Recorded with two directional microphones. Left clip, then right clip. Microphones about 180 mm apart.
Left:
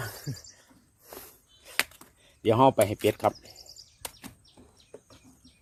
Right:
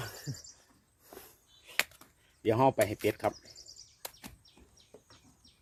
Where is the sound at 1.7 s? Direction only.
35° left (ahead or behind).